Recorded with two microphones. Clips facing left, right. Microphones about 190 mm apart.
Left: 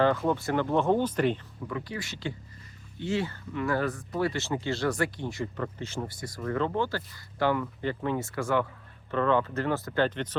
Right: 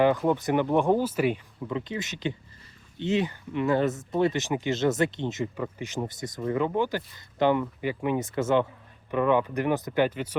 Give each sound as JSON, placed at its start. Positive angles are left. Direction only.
{"t": 0.0, "sound": "speech", "side_deg": -15}
{"t": 1.7, "sound": "speech", "side_deg": -20}